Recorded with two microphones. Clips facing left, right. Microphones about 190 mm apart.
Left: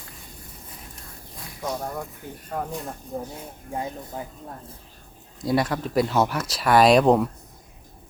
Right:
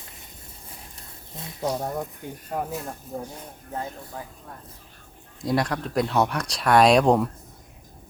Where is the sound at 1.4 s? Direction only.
25° right (ahead or behind).